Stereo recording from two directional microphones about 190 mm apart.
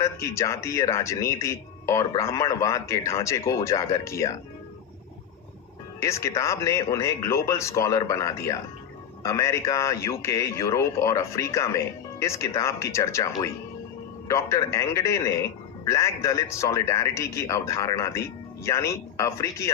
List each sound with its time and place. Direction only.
0.0 s speech: 15° left (ahead or behind)
6.0 s speech: 15° left (ahead or behind)
14.3 s speech: 15° left (ahead or behind)